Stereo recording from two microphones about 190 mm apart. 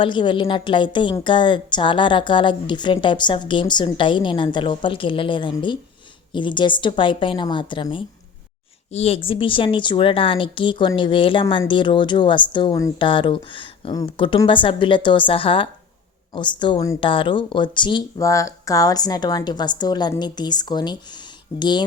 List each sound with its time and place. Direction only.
0.0 s a woman's voice: 25° left (ahead or behind)